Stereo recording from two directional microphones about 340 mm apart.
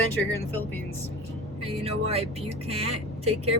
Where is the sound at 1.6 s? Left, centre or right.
Centre.